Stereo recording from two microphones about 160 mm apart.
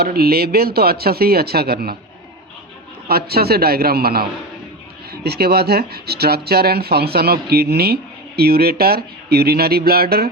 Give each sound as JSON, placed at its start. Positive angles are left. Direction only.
{"t": 0.0, "sound": "speech", "side_deg": -75}
{"t": 3.1, "sound": "speech", "side_deg": -75}